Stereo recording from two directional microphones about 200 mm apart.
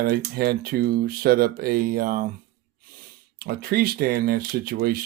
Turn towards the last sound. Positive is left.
turn(degrees=-50)  # may be behind; listen again after turning